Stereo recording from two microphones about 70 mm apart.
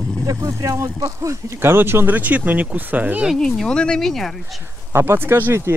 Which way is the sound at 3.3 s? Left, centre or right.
Centre.